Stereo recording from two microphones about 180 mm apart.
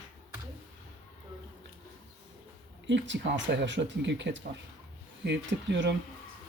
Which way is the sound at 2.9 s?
85° right.